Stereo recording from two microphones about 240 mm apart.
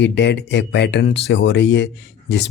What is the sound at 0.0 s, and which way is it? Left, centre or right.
Speech, left.